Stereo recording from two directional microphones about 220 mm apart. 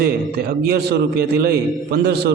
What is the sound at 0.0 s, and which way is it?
A man's voice, 45° right (ahead or behind).